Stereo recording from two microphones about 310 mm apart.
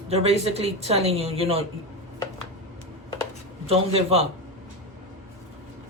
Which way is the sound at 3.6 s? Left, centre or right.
Centre.